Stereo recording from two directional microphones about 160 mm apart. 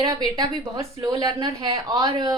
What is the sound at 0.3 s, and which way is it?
Speech, 20° right (ahead or behind).